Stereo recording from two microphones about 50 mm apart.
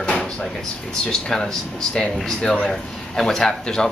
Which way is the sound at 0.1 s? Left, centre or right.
Centre.